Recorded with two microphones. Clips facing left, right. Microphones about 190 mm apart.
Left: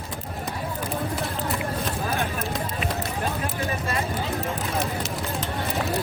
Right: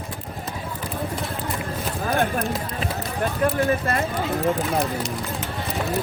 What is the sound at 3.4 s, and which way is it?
Speech, 55° right (ahead or behind).